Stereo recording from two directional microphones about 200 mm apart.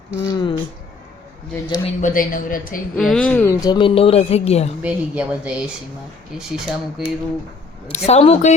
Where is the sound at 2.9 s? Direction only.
5° left (ahead or behind); by 4.7 s 30° left (ahead or behind).